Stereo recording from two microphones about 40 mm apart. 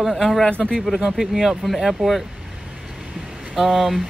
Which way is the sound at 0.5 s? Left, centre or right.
Left.